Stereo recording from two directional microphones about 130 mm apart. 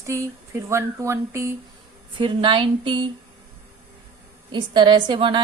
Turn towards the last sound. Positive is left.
turn(degrees=-40)  # may be behind; listen again after turning